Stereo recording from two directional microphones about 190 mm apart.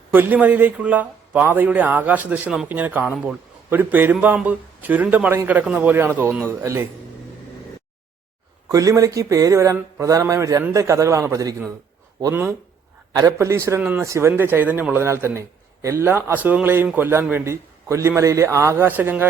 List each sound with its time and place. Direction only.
0.1 s a man's voice: 10° right (ahead or behind)
8.7 s a man's voice: 15° right (ahead or behind)